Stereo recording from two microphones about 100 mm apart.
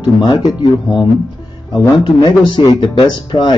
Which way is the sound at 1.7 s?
50° left (ahead or behind).